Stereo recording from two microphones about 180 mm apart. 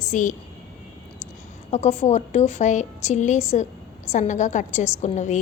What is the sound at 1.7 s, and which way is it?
A woman's voice, 35° left (ahead or behind).